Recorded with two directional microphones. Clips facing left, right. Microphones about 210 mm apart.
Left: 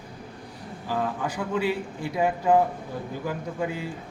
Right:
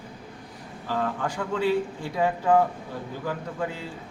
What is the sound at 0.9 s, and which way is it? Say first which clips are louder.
Speech: even; 10° left (ahead or behind).